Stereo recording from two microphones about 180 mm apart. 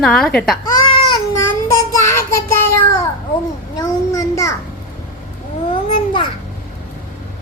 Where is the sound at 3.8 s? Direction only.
20° left (ahead or behind).